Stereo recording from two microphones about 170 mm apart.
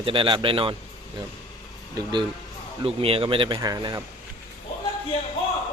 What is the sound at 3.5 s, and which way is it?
Speech, 20° right (ahead or behind).